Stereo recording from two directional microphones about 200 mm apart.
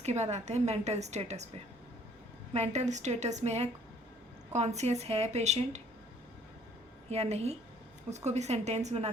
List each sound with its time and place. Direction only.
0.0 s a woman's voice: 35° right (ahead or behind)
7.1 s a woman's voice: 30° right (ahead or behind)